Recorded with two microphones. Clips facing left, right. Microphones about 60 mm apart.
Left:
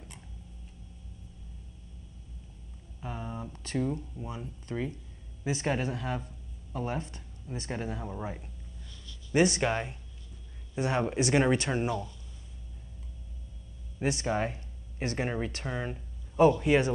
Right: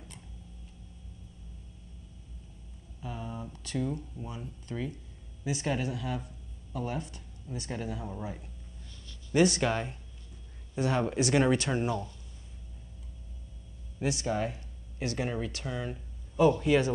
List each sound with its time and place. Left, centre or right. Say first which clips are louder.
3.0 s a sound: left 1 dB; left
3.5 s speech: left 3 dB; left
3.8 s speech: left 2 dB; centre
5.4 s speech: left 1 dB; left
9.3 s speech: even; centre
14.0 s speech: left 1 dB; left